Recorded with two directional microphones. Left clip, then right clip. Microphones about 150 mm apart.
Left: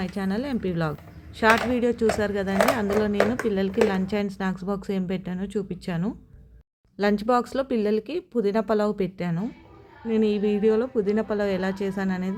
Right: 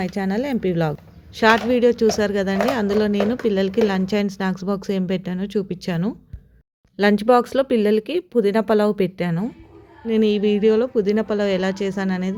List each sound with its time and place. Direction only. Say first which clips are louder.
0.0 s speech: right 6 dB; 30° right (ahead or behind)